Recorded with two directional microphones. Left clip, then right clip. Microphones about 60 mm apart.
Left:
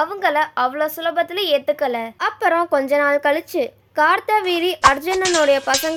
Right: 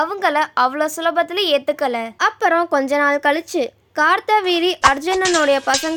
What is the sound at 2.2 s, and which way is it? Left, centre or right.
A woman's voice, right.